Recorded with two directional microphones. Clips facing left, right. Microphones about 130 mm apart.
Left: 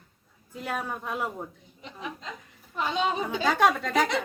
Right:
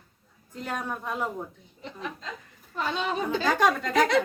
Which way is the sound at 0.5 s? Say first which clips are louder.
Even; 5° left (ahead or behind).